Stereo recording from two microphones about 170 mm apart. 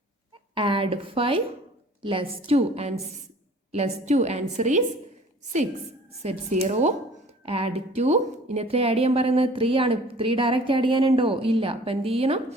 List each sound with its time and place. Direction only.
0.5 s a woman's voice: 30° right (ahead or behind)
6.2 s a woman's voice: 45° right (ahead or behind)